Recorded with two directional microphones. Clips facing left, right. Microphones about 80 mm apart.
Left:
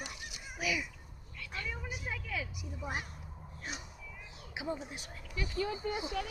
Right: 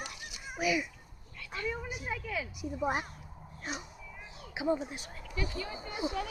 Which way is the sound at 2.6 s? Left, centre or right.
Right.